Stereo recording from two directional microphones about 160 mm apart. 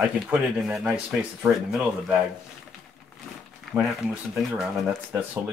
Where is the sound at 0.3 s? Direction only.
10° right (ahead or behind).